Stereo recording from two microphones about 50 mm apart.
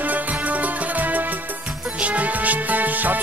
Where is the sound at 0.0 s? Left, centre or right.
Right.